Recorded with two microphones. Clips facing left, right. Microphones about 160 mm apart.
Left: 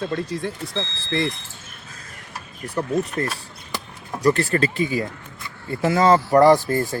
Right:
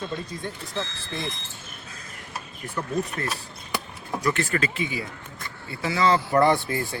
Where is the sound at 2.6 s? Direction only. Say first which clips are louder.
Left 6 dB; 40° left (ahead or behind).